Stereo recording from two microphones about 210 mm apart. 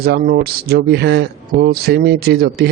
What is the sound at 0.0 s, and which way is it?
A man's voice, 50° right (ahead or behind).